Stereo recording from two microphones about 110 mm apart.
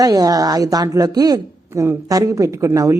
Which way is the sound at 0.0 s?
35° right (ahead or behind).